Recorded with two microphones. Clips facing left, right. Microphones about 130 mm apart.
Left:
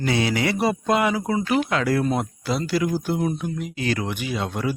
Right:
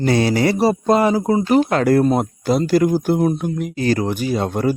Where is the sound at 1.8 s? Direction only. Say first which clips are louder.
Right 7 dB; 45° right (ahead or behind).